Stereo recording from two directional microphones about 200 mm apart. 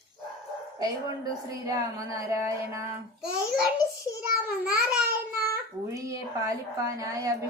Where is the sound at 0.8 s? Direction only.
20° right (ahead or behind).